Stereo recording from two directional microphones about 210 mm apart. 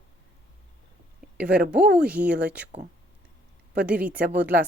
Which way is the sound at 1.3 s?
5° right (ahead or behind).